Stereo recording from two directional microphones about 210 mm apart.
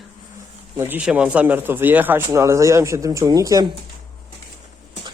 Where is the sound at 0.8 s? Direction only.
10° right (ahead or behind).